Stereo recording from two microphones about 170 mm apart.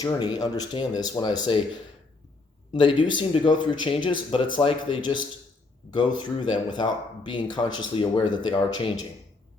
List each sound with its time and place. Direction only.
0.0 s speech: 25° left (ahead or behind)
3.2 s speech: 30° left (ahead or behind)